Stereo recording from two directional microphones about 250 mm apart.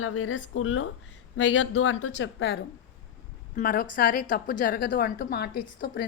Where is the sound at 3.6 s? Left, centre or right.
Left.